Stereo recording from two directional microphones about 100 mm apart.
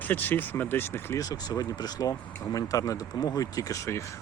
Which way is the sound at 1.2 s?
35° left (ahead or behind).